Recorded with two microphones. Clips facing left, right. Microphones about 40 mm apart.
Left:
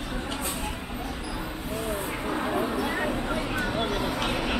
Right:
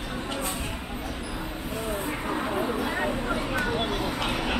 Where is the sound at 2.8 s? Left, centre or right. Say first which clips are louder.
Even; centre.